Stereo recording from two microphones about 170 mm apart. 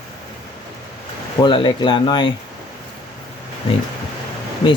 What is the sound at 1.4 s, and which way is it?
Speech, 25° left (ahead or behind).